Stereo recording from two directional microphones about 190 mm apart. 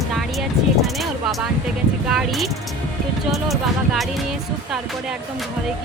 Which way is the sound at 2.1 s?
Centre (ahead or behind).